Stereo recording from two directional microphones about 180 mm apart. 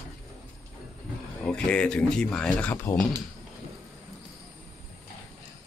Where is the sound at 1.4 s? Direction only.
5° left (ahead or behind).